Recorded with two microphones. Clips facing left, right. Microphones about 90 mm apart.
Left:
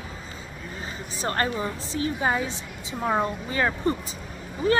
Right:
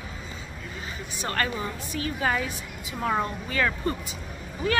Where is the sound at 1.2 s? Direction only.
30° left (ahead or behind).